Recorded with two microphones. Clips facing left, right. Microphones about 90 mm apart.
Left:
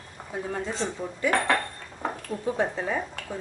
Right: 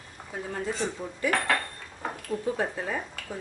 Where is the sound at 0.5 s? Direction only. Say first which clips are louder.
Right 1 dB; 20° left (ahead or behind).